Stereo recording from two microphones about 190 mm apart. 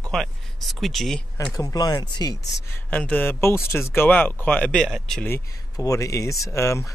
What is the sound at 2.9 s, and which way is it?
Speech, 10° left (ahead or behind).